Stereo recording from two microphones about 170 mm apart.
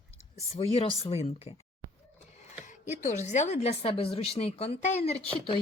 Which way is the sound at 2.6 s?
45° left (ahead or behind).